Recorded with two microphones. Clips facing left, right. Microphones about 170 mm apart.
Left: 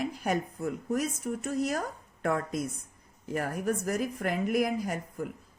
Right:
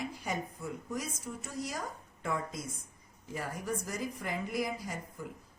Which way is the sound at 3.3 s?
60° left (ahead or behind).